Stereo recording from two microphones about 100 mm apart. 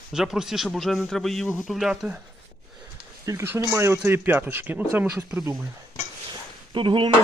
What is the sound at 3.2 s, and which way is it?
Speech, 25° right (ahead or behind).